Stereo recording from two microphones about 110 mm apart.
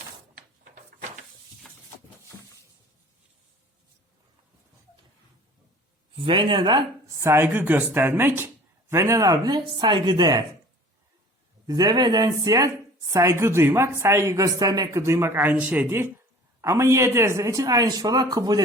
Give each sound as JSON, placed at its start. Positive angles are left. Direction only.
{"t": 6.1, "sound": "a man's voice", "side_deg": -50}
{"t": 7.2, "sound": "speech", "side_deg": -20}
{"t": 11.6, "sound": "speech", "side_deg": -40}
{"t": 15.9, "sound": "speech", "side_deg": -25}